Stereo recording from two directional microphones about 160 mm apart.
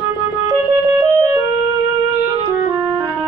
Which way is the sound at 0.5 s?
25° right (ahead or behind).